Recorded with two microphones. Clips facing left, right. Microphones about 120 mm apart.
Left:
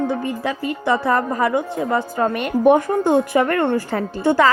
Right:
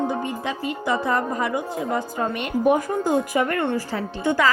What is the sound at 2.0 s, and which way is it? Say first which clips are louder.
A woman's voice: left 5 dB; 70° left (ahead or behind).